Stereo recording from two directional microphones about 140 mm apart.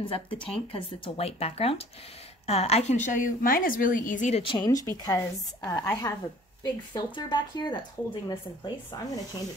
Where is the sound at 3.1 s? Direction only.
80° left.